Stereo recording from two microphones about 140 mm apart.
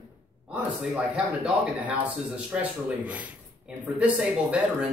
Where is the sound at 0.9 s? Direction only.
10° right (ahead or behind).